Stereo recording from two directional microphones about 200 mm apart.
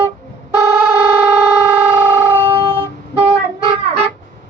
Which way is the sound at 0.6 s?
10° right (ahead or behind).